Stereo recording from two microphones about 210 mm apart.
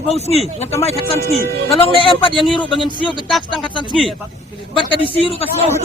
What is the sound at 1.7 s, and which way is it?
Speech, 25° left (ahead or behind).